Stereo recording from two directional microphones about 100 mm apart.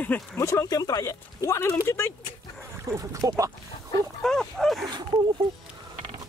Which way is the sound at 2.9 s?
30° right (ahead or behind).